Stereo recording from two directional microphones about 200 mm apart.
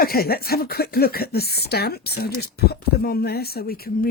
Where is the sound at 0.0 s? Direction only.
50° left (ahead or behind).